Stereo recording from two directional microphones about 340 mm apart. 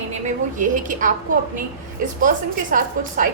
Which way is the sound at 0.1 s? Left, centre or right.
Right.